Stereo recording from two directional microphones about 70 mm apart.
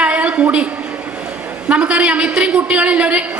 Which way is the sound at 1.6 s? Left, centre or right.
Centre.